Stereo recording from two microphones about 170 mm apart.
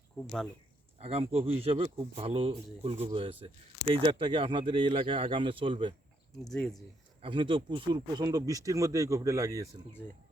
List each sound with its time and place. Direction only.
0.9 s speech: 35° right (ahead or behind)
6.4 s speech: 5° left (ahead or behind)
7.2 s speech: 30° right (ahead or behind)